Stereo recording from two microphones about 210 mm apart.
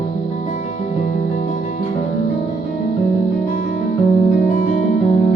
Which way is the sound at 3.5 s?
45° left (ahead or behind).